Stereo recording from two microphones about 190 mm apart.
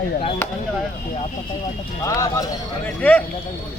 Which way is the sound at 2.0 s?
20° left (ahead or behind).